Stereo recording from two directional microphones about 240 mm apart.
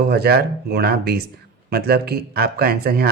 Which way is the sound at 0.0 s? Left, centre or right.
Right.